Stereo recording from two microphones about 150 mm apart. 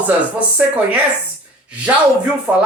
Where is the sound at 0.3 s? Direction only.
10° right (ahead or behind).